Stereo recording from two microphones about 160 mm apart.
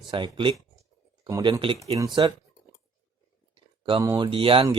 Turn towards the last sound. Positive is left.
turn(degrees=-35)  # may be behind; listen again after turning